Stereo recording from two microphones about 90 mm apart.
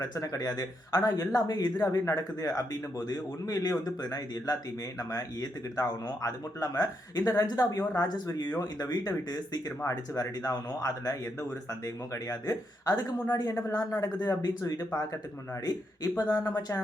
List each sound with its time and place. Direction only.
0.0 s speech: 45° left (ahead or behind)
12.3 s speech: 45° left (ahead or behind)